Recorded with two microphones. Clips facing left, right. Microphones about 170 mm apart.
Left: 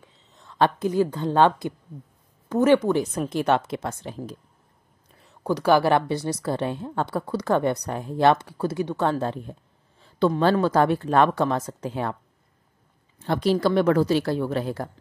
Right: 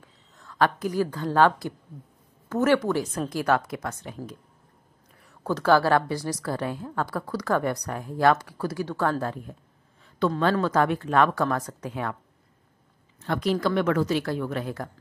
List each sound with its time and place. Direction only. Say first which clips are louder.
0.0 s a woman's voice: even; 20° left (ahead or behind)
5.2 s a woman's voice: left 2 dB; 15° left (ahead or behind)
10.0 s a sound: left 4 dB; 30° left (ahead or behind)
10.4 s a woman's voice: left 2 dB; 30° left (ahead or behind)
13.2 s a woman's voice: left 3 dB; 30° left (ahead or behind)